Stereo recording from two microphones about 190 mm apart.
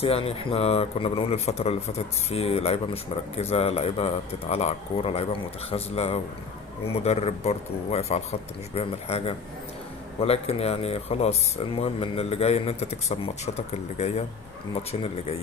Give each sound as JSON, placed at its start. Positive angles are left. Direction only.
{"t": 0.0, "sound": "speech", "side_deg": 30}